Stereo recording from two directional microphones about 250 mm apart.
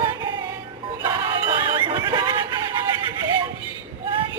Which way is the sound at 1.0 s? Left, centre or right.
Centre.